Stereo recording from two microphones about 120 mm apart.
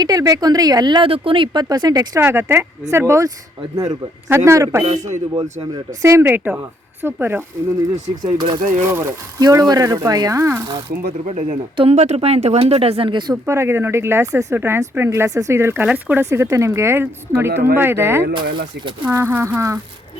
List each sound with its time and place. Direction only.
0.0 s speech: 30° right (ahead or behind)
1.0 s speech: 50° right (ahead or behind)
1.6 s speech: 35° right (ahead or behind)
2.2 s speech: 20° right (ahead or behind)
4.9 s speech: 80° right
5.3 s speech: 30° right (ahead or behind)
6.1 s speech: 20° right (ahead or behind)
8.2 s speech: 35° right (ahead or behind)
8.9 s speech: 20° right (ahead or behind)
11.3 s speech: 55° right (ahead or behind)
13.4 s speech: 20° right (ahead or behind)
16.3 s speech: 25° right (ahead or behind)